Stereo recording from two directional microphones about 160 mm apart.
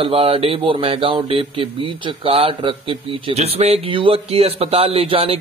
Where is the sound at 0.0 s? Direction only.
35° right (ahead or behind).